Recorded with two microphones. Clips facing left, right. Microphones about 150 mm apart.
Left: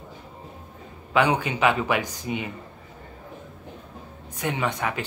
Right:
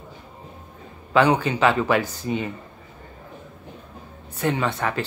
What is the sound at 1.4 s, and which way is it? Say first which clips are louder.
Speech: right 3 dB; 15° left (ahead or behind).